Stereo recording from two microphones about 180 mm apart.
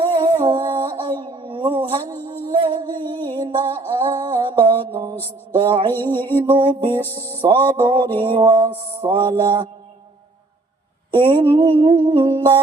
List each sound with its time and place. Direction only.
0.0 s humming: 30° right (ahead or behind)
4.4 s music: 25° right (ahead or behind)
4.9 s mantra: 20° right (ahead or behind)
5.5 s music: 30° right (ahead or behind)
6.0 s a sound: 10° left (ahead or behind)
6.4 s music: 25° right (ahead or behind)
11.1 s music: 25° right (ahead or behind)